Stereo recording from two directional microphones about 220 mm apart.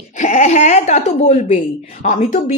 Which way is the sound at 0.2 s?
30° left (ahead or behind).